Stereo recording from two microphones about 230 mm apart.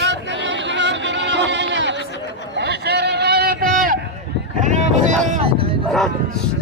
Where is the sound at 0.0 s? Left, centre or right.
Right.